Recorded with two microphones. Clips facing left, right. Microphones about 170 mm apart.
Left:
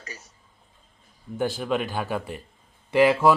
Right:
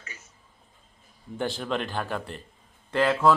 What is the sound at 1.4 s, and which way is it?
Speech, 5° left (ahead or behind).